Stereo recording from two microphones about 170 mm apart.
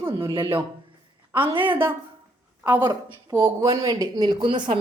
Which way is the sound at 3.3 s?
15° right (ahead or behind).